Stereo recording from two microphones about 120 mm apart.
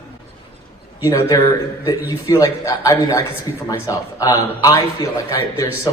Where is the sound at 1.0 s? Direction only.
25° left (ahead or behind).